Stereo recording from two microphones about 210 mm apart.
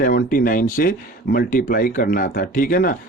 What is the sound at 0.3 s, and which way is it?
Speech, 40° left (ahead or behind).